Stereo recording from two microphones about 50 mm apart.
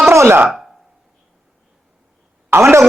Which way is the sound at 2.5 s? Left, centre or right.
Right.